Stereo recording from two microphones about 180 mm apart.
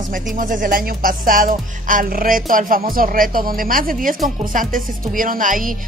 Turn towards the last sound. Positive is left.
turn(degrees=-50)  # may be behind; listen again after turning